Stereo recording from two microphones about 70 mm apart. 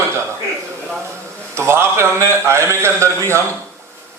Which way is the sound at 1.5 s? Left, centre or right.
Right.